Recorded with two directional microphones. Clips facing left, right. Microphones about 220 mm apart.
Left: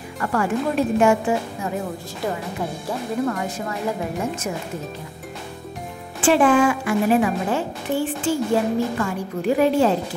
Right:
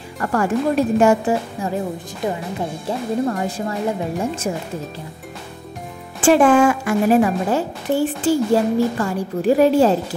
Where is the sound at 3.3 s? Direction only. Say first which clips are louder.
Right 3 dB; 30° right (ahead or behind).